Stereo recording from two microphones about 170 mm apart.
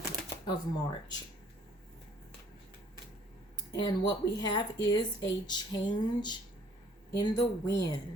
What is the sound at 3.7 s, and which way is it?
Speech, 25° left (ahead or behind).